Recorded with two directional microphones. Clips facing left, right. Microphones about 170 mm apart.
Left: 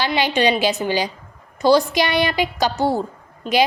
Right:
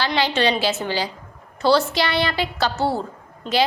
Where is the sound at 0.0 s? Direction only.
15° left (ahead or behind).